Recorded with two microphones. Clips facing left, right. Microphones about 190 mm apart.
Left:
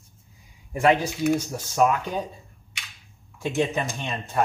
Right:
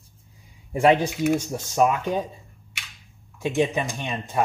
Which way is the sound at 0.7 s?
30° right (ahead or behind).